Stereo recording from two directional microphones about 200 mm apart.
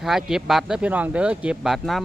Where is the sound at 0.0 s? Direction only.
5° right (ahead or behind).